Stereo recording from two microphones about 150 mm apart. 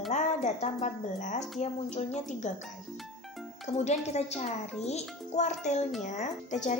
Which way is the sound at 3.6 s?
50° left (ahead or behind).